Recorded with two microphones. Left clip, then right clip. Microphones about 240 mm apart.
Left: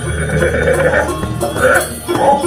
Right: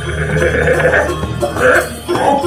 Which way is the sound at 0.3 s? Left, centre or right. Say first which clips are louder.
Even; right.